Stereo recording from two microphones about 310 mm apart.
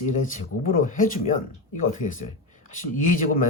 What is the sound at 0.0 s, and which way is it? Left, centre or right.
Speech, left.